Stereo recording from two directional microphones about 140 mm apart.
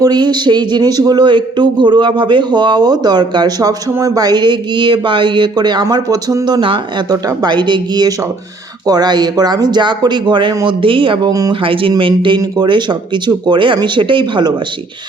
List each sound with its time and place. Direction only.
0.0 s speech: 30° right (ahead or behind)
11.6 s speech: 40° right (ahead or behind)